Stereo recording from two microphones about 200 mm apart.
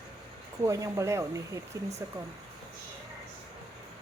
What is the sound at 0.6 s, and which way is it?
Speech, 15° right (ahead or behind).